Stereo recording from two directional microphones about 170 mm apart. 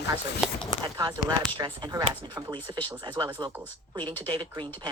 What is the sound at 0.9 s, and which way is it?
Speech, 20° right (ahead or behind).